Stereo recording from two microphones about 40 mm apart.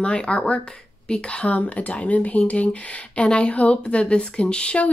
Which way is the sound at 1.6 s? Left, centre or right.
Left.